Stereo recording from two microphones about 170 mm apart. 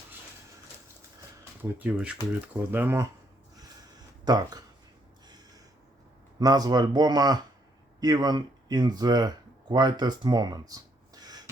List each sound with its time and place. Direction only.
1.8 s speech: 5° right (ahead or behind)
4.3 s speech: 20° right (ahead or behind)
6.4 s speech: 25° right (ahead or behind)